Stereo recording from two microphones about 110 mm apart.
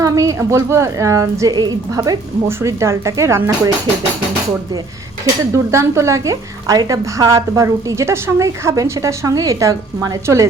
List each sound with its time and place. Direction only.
0.0 s a woman's voice: 30° right (ahead or behind)
5.7 s a woman's voice: 25° right (ahead or behind)